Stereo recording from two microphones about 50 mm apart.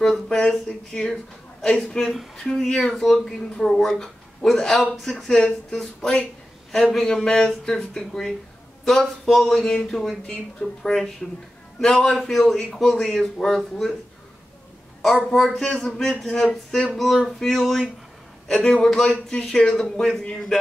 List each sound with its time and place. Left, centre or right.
0.0 s speech: centre
15.3 s speech: centre
16.4 s a sound: left
16.9 s speech: centre